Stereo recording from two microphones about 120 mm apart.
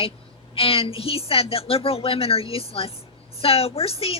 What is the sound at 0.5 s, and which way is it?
A woman's voice, 50° left (ahead or behind).